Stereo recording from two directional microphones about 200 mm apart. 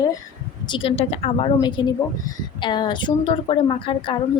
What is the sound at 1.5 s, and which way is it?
A woman's voice, 20° left (ahead or behind).